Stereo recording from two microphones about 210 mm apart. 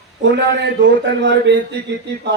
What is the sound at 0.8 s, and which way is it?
Speech, 55° right (ahead or behind).